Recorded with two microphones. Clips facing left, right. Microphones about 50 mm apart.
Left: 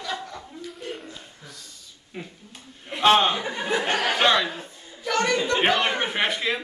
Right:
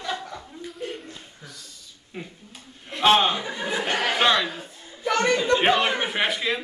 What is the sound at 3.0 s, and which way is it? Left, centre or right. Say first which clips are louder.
Chuckle: even; centre.